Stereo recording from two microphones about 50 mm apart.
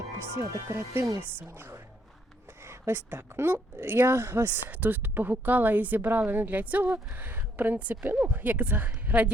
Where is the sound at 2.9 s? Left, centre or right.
Right.